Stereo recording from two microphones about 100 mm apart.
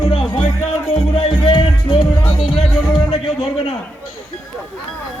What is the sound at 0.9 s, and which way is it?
Music, 65° left (ahead or behind).